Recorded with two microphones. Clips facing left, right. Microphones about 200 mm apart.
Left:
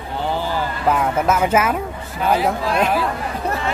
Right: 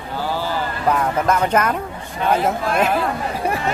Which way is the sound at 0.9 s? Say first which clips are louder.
Even; 5° left (ahead or behind).